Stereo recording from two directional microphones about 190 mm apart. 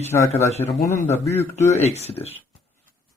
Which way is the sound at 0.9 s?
10° left (ahead or behind).